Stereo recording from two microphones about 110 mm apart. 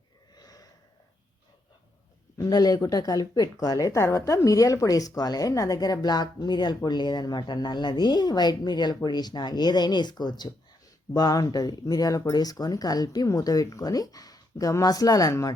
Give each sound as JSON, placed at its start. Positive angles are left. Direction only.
{"t": 0.3, "sound": "snort", "side_deg": 35}
{"t": 2.4, "sound": "speech", "side_deg": 35}